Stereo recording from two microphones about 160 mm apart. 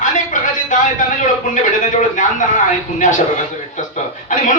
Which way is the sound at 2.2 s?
50° left (ahead or behind).